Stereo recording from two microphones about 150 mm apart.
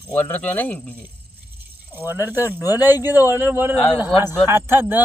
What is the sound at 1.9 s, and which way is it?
A man's voice, 15° right (ahead or behind).